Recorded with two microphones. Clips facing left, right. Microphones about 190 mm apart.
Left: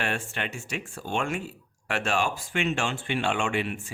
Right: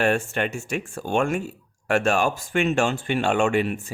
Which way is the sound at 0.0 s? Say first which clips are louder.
Right 9 dB; 45° right (ahead or behind).